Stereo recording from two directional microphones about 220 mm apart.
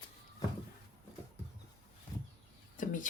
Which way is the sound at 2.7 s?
35° left (ahead or behind).